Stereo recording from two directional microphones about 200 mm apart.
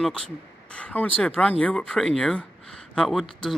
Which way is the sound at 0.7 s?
5° left (ahead or behind).